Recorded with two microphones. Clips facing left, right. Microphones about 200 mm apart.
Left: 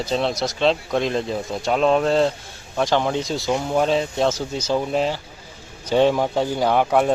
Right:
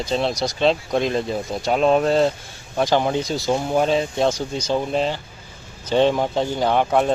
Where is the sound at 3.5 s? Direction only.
15° right (ahead or behind).